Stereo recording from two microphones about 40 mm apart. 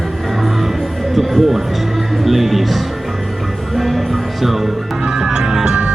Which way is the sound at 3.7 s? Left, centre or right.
Centre.